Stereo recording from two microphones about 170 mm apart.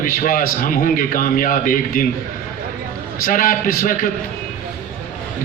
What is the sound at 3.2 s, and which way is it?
Speech, 55° left (ahead or behind).